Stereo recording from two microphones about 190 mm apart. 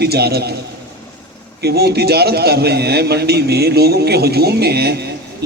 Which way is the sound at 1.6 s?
55° right (ahead or behind).